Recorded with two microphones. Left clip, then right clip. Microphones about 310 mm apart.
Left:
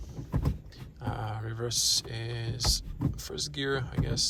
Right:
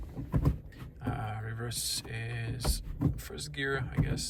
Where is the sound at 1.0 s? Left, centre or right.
Centre.